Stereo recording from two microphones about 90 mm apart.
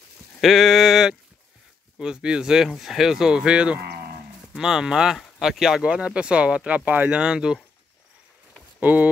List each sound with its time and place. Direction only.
0.4 s sheep: centre (ahead or behind)
2.0 s speech: 10° right (ahead or behind)
8.7 s speech: 15° right (ahead or behind)